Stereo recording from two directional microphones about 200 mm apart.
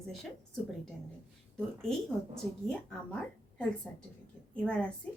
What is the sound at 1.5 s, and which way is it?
Speech, 5° left (ahead or behind).